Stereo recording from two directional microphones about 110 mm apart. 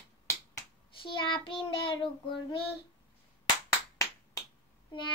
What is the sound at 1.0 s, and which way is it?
Child singing, 50° left (ahead or behind).